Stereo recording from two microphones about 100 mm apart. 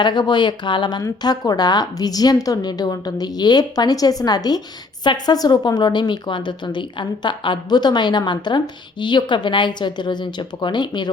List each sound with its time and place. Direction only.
0.0 s a woman's voice: 50° left (ahead or behind)